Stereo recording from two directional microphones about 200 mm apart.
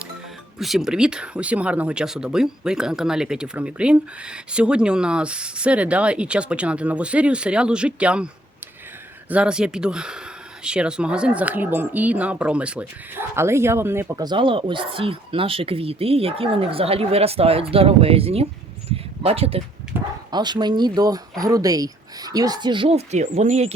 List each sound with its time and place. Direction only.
0.6 s speech: centre (ahead or behind)
9.3 s speech: 5° right (ahead or behind); by 18.4 s 30° right (ahead or behind)
18.9 s a sound: 30° right (ahead or behind)
19.9 s bow-wow: 10° right (ahead or behind)
20.3 s speech: 20° right (ahead or behind)